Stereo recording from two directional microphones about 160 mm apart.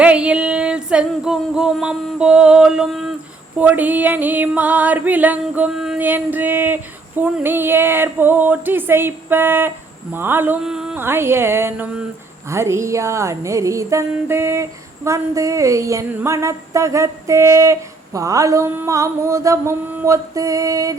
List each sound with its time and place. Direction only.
0.0 s music: 5° right (ahead or behind)
3.6 s female singing: 10° right (ahead or behind)
11.0 s female singing: 15° right (ahead or behind)
14.1 s a sound: 15° right (ahead or behind)